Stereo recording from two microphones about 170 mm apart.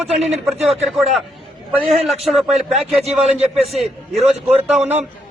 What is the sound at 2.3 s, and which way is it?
Speech, centre (ahead or behind).